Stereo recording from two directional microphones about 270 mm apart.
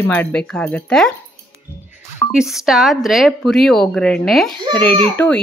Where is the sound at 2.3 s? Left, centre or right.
Centre.